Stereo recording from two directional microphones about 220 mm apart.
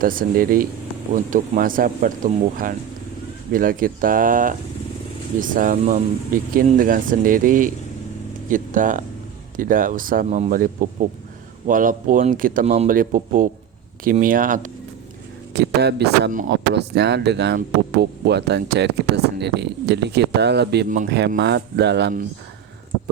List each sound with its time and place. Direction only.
0.0 s speech: 40° right (ahead or behind)
15.5 s speech: 50° right (ahead or behind)